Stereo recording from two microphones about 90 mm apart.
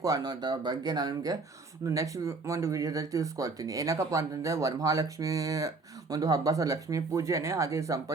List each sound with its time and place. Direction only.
0.0 s speech: 45° right (ahead or behind)